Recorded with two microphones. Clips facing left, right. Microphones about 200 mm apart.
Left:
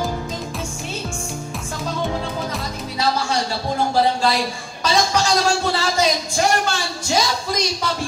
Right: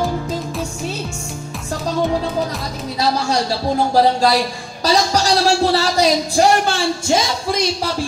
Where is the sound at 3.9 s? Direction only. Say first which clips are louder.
Right 4 dB; 40° right (ahead or behind).